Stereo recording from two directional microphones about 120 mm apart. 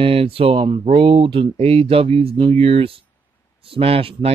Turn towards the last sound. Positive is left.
turn(degrees=-55)  # may be behind; listen again after turning